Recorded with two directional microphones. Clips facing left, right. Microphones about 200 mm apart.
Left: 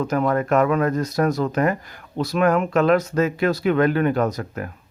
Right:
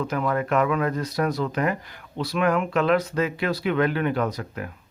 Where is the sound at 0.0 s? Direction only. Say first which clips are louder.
Left 4 dB; 45° left (ahead or behind).